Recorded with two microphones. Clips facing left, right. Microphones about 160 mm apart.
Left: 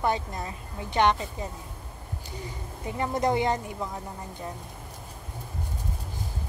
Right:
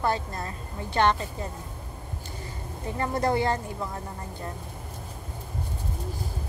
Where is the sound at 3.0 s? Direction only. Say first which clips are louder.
Even; 15° left (ahead or behind).